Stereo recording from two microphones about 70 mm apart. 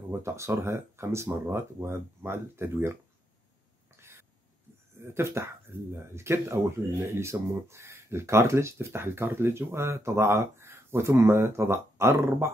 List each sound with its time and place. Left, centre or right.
0.2 s speech: right
3.9 s a sound: right
5.0 s speech: right